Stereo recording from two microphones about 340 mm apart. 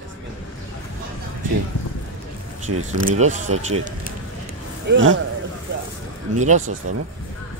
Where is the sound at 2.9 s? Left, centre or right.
Right.